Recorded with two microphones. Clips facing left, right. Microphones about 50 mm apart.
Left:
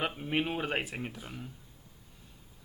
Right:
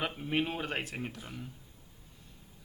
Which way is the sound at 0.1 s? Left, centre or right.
Centre.